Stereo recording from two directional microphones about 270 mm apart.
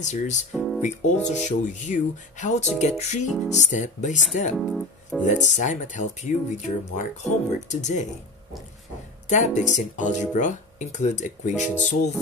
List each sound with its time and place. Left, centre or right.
0.0 s speech: left
0.5 s music: centre
0.8 s speech: left
4.6 s music: centre
5.2 s speech: left
9.3 s speech: left